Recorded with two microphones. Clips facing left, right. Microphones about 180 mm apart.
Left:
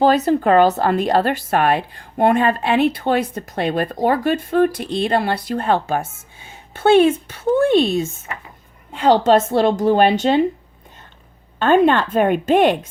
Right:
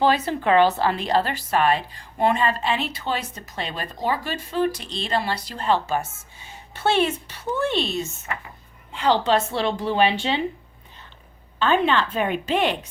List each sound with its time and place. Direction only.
0.0 s a woman's voice: 40° left (ahead or behind)
11.6 s a woman's voice: 50° left (ahead or behind)